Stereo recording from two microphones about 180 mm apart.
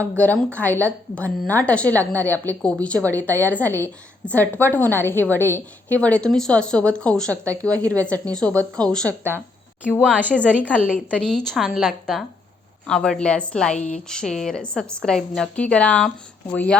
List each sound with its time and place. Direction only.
0.0 s a woman's voice: 10° left (ahead or behind)
10.0 s a woman's voice: 5° right (ahead or behind)